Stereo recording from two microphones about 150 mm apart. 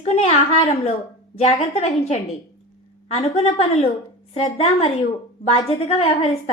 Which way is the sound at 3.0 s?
40° left (ahead or behind).